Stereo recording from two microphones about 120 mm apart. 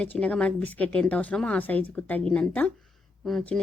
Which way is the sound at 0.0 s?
10° left (ahead or behind).